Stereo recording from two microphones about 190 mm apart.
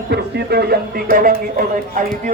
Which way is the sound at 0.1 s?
60° right (ahead or behind).